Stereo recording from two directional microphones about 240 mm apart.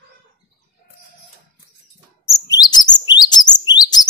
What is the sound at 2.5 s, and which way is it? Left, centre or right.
Chirp, centre.